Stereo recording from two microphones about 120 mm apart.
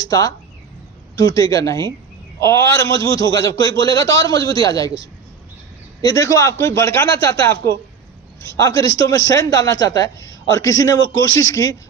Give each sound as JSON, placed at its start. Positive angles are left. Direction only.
{"t": 0.0, "sound": "a man's voice", "side_deg": 30}
{"t": 6.0, "sound": "a man's voice", "side_deg": 30}